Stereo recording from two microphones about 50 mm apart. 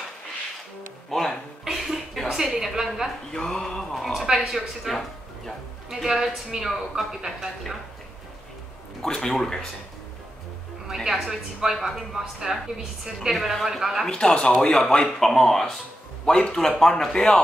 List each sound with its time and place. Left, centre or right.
1.1 s music: centre
1.6 s a sound: centre
3.3 s speech: centre
3.9 s a woman's voice: centre
5.9 s a woman's voice: centre
9.0 s speech: centre
9.3 s a woman's voice: centre
11.1 s a woman's voice: centre
14.2 s speech: centre